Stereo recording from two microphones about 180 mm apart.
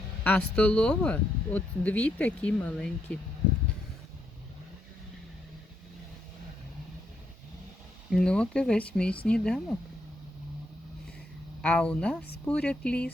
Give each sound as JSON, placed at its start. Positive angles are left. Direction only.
{"t": 0.3, "sound": "speech", "side_deg": 5}
{"t": 8.1, "sound": "speech", "side_deg": 5}
{"t": 11.6, "sound": "speech", "side_deg": 5}